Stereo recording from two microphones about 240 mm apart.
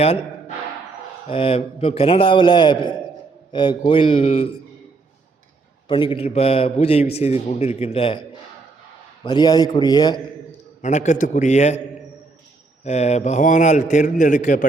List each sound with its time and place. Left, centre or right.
0.0 s a sound: left
1.3 s a man's voice: left
5.9 s a man's voice: left
9.2 s a man's voice: centre
10.8 s a man's voice: left
12.8 s a man's voice: left